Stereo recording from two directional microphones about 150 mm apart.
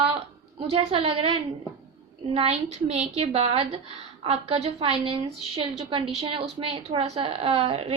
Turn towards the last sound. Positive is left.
turn(degrees=-40)  # may be behind; listen again after turning